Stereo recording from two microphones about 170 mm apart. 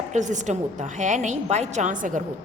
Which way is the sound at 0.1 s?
45° right (ahead or behind).